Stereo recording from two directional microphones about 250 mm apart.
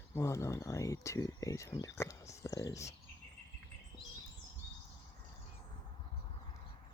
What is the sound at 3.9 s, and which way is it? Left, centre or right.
Bird, centre.